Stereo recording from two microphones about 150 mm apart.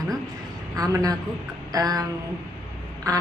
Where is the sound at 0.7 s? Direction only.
25° right (ahead or behind).